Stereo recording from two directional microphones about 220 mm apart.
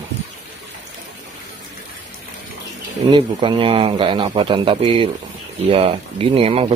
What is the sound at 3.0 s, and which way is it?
A man's voice, 20° right (ahead or behind).